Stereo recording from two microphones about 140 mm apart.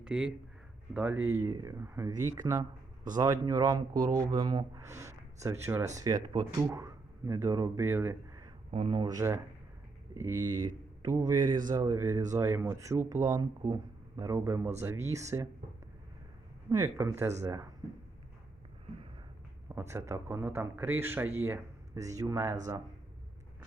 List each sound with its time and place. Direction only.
0.0 s speech: 5° right (ahead or behind)
8.7 s speech: 40° right (ahead or behind); by 15.4 s 20° right (ahead or behind)
16.6 s speech: 25° right (ahead or behind)
19.6 s speech: 20° right (ahead or behind)